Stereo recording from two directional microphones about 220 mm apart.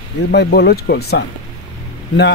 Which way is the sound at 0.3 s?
50° left (ahead or behind).